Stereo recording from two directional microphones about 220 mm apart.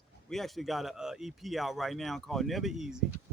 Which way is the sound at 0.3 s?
Centre (ahead or behind).